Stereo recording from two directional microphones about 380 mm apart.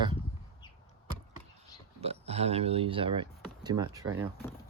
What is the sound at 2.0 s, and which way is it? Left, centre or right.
Speech, centre.